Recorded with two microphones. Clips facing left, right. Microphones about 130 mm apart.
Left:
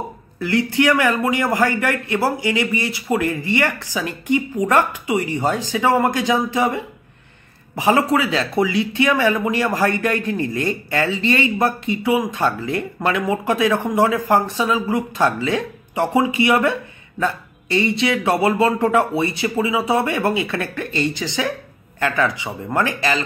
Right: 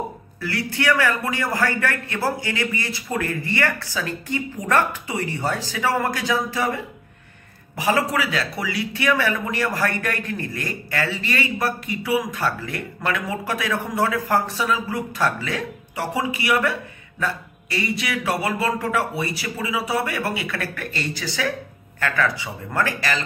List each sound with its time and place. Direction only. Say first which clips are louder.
0.4 s a man's voice: left 8 dB; 20° left (ahead or behind)